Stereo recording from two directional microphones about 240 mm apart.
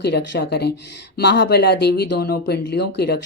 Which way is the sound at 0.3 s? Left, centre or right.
Left.